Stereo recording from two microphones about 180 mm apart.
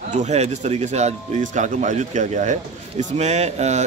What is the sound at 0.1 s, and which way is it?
Speech, 40° right (ahead or behind).